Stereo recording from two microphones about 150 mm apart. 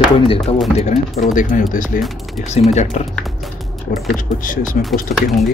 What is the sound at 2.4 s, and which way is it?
Speech, 50° left (ahead or behind).